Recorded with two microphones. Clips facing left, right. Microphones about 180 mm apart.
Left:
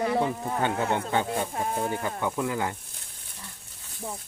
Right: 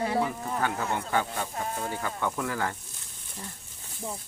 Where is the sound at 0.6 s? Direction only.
25° left (ahead or behind).